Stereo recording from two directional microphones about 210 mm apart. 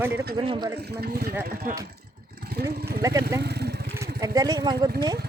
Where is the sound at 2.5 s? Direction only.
50° right (ahead or behind).